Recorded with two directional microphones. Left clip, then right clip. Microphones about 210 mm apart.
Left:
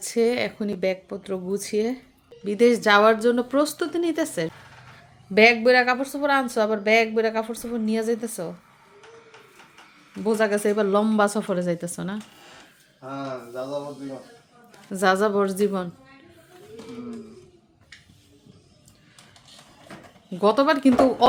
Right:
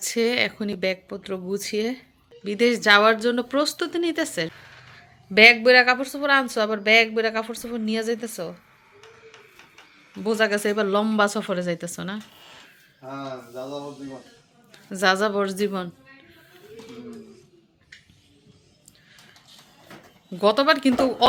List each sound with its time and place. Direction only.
0.0 s speech: centre (ahead or behind)
10.2 s speech: 5° left (ahead or behind)
14.7 s a man's voice: 5° left (ahead or behind)
20.4 s speech: 5° left (ahead or behind)